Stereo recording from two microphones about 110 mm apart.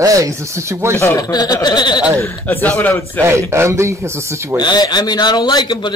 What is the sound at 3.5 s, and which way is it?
A man's voice, 25° right (ahead or behind).